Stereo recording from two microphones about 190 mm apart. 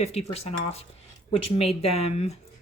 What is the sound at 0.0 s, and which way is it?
Speech, 35° left (ahead or behind).